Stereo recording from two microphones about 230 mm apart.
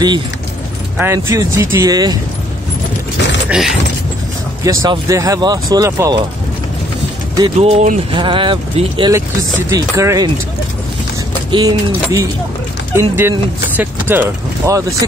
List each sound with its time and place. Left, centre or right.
0.9 s speech: centre
3.4 s speech: centre
4.6 s speech: centre
7.3 s speech: right
11.5 s speech: centre